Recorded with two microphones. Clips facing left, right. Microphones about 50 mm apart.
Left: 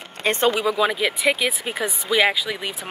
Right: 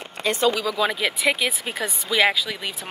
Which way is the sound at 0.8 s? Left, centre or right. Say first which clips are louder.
Left 2 dB; centre.